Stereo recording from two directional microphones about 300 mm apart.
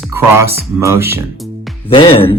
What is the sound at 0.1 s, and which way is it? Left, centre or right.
Speech, centre.